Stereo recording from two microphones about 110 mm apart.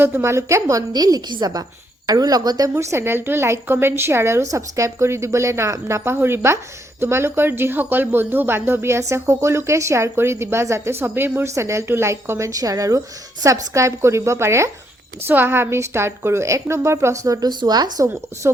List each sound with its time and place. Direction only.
0.0 s a woman's voice: 20° right (ahead or behind); by 18.0 s 40° right (ahead or behind)
18.0 s speech: 25° right (ahead or behind)